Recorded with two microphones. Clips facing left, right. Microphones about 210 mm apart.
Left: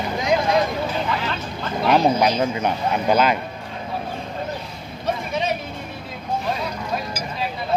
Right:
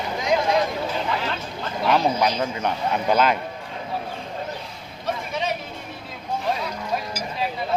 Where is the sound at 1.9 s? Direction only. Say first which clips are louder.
Left 3 dB; 25° left (ahead or behind).